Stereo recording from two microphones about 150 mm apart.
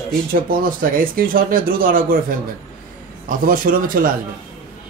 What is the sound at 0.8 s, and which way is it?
Speech, 70° right (ahead or behind).